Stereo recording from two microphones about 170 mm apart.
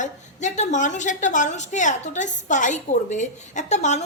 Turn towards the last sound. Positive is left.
turn(degrees=40)  # may be behind; listen again after turning